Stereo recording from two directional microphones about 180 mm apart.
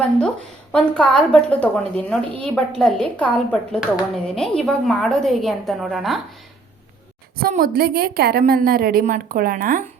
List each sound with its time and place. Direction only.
0.7 s a woman's voice: 5° left (ahead or behind)
7.4 s a woman's voice: 55° right (ahead or behind)